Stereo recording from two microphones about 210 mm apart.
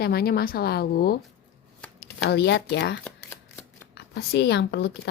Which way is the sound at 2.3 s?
55° left (ahead or behind).